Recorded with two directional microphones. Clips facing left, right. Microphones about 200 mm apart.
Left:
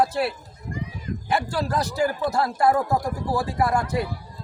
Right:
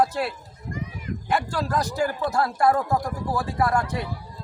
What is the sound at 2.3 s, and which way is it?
Speech, 25° left (ahead or behind).